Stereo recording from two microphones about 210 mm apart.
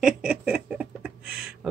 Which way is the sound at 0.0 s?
5° right (ahead or behind).